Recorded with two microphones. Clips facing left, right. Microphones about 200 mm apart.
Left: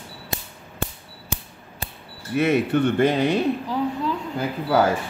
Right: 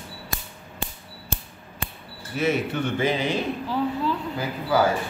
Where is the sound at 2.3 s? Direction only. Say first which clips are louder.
Left 5 dB; 60° left (ahead or behind).